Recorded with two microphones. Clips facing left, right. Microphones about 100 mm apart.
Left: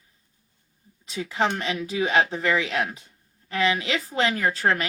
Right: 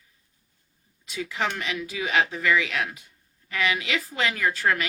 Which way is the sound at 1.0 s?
30° left (ahead or behind).